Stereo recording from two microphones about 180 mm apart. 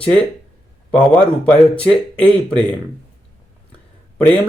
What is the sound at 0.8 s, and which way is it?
Speech, 5° left (ahead or behind).